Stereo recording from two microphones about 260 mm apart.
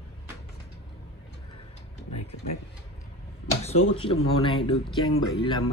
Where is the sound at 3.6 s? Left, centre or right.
Left.